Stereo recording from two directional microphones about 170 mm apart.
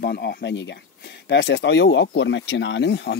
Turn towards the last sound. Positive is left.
turn(degrees=90)